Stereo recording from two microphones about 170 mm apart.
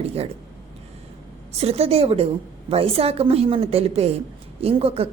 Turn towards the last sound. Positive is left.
turn(degrees=-35)  # may be behind; listen again after turning